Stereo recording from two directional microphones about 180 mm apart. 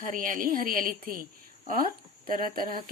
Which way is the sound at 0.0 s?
45° right (ahead or behind).